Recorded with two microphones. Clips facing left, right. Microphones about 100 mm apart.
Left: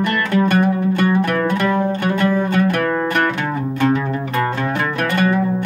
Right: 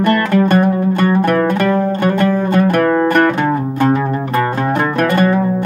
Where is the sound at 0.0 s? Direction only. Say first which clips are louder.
Right 4 dB; 40° right (ahead or behind).